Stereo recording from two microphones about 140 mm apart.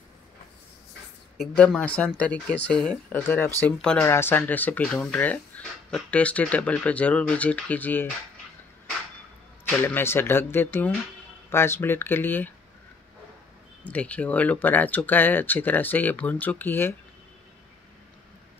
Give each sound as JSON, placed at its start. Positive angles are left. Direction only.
{"t": 1.4, "sound": "speech", "side_deg": 5}
{"t": 9.7, "sound": "speech", "side_deg": 15}
{"t": 13.8, "sound": "speech", "side_deg": 10}